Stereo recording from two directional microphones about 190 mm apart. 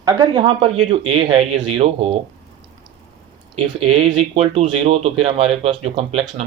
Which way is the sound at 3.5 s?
30° right (ahead or behind).